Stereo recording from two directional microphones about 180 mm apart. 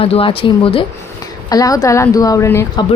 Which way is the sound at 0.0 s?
30° left (ahead or behind).